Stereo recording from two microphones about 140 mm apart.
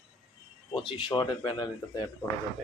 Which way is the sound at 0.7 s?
35° left (ahead or behind).